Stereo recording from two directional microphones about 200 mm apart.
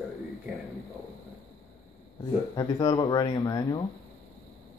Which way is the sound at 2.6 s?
20° left (ahead or behind).